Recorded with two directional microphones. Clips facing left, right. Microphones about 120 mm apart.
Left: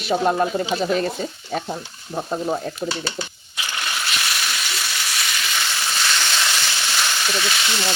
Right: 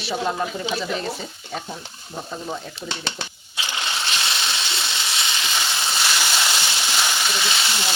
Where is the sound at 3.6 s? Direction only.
25° right (ahead or behind).